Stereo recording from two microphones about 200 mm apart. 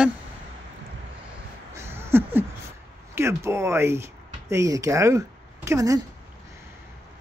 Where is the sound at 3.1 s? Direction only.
15° right (ahead or behind).